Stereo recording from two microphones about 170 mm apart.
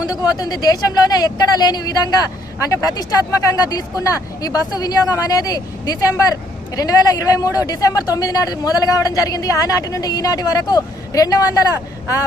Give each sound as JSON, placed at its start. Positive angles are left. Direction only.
{"t": 0.1, "sound": "speech", "side_deg": 20}